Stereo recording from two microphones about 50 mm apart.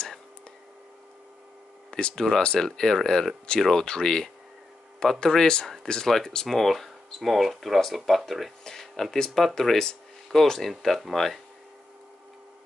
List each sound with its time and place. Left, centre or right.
1.9 s speech: centre
2.6 s speech: centre